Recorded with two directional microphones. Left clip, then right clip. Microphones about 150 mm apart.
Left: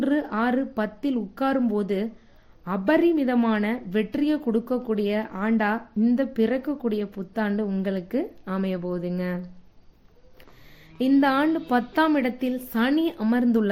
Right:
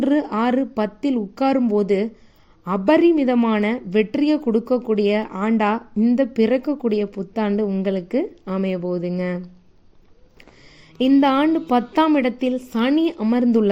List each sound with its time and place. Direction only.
0.0 s speech: 25° right (ahead or behind)
10.9 s a woman's voice: 20° right (ahead or behind)